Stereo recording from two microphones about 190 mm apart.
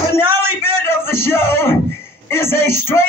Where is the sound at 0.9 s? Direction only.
15° left (ahead or behind).